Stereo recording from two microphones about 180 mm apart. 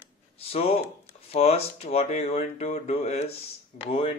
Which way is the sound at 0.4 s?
35° left (ahead or behind).